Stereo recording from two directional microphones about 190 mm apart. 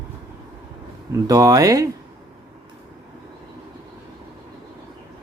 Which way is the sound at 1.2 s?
20° right (ahead or behind).